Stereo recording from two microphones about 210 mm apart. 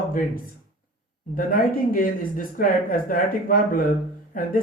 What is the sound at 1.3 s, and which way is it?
Speech, 40° left (ahead or behind).